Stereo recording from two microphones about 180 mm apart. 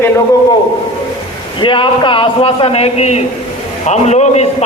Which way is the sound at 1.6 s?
30° left (ahead or behind).